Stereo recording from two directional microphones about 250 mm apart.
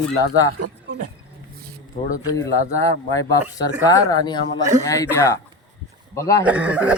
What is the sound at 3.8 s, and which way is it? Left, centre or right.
Speech, centre.